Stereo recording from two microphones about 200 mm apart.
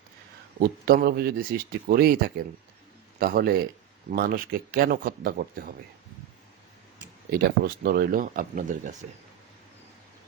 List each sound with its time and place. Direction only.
0.9 s speech: 50° right (ahead or behind)
7.3 s speech: 50° right (ahead or behind)